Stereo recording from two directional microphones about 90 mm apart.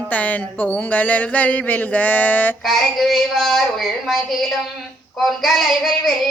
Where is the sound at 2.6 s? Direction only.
Centre (ahead or behind).